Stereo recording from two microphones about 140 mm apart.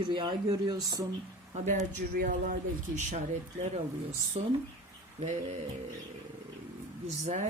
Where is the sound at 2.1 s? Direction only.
90° right.